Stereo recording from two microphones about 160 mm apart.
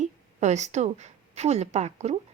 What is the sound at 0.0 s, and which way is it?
A woman's voice, 45° right (ahead or behind).